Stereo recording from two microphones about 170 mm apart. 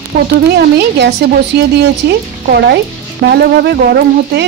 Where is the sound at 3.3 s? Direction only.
80° right.